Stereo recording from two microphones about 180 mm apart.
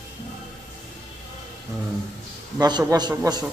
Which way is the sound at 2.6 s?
20° right (ahead or behind).